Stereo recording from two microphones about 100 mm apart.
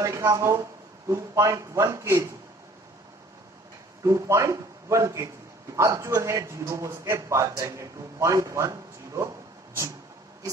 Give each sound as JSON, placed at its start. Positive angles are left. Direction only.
{"t": 0.0, "sound": "a man's voice", "side_deg": -30}
{"t": 4.0, "sound": "a man's voice", "side_deg": -30}